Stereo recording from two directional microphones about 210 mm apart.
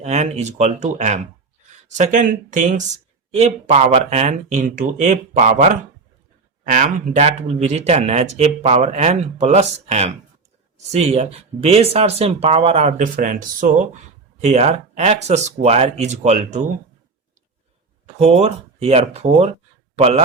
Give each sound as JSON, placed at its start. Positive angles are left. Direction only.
{"t": 0.0, "sound": "speech", "side_deg": -30}
{"t": 18.0, "sound": "speech", "side_deg": -30}